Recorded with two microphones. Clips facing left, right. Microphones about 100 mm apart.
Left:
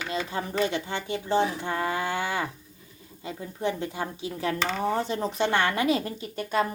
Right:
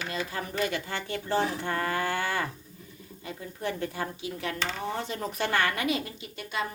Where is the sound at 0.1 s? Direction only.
25° left (ahead or behind).